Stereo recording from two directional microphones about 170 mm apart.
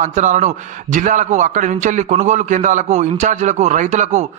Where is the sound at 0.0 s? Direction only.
45° right (ahead or behind).